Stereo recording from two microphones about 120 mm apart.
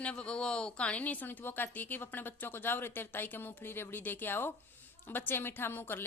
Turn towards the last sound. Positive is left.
turn(degrees=20)  # may be behind; listen again after turning